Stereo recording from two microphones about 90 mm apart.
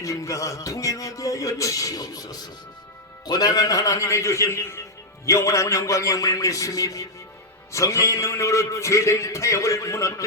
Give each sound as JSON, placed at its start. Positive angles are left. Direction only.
{"t": 0.0, "sound": "music", "side_deg": 35}
{"t": 3.2, "sound": "a man's voice", "side_deg": 45}